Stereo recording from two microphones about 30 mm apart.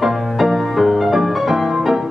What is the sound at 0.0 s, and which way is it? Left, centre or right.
Music, centre.